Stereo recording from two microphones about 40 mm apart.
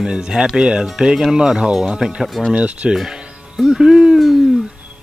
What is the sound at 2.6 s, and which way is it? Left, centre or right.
Speech, right.